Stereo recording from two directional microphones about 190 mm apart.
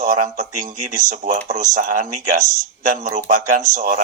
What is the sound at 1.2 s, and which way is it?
Speech, 40° right (ahead or behind).